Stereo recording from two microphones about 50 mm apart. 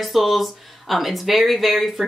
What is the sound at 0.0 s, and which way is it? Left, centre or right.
Speech, centre.